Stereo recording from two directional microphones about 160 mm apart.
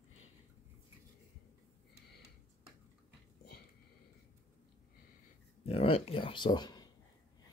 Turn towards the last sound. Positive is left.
turn(degrees=25)  # may be behind; listen again after turning